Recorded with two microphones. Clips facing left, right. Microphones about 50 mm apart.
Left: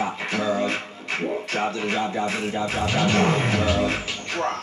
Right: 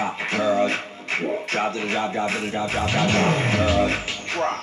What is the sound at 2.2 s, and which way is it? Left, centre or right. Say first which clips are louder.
Music: right 1 dB; right.